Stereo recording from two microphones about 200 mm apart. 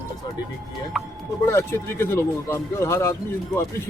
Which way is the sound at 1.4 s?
15° left (ahead or behind).